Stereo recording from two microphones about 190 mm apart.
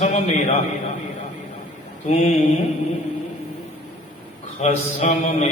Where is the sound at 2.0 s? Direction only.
35° left (ahead or behind).